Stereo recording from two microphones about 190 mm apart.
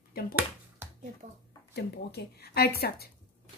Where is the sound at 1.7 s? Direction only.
60° left (ahead or behind).